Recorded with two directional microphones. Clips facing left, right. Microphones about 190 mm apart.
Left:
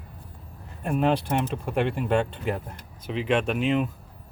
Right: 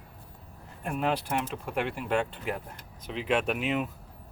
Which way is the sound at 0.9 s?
25° left (ahead or behind).